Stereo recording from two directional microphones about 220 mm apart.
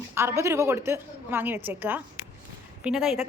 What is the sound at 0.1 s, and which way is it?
A woman's voice, 10° right (ahead or behind).